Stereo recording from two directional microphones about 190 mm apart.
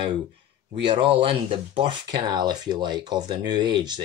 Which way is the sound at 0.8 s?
25° right (ahead or behind).